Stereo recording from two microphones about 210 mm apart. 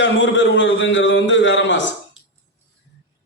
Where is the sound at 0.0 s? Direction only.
60° left (ahead or behind).